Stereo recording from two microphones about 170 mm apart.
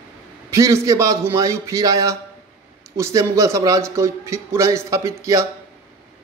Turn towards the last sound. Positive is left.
turn(degrees=-20)  # may be behind; listen again after turning